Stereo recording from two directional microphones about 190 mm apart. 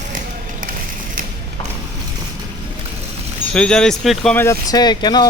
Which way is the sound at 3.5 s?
5° left (ahead or behind).